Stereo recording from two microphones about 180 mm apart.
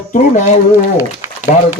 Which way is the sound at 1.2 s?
10° right (ahead or behind).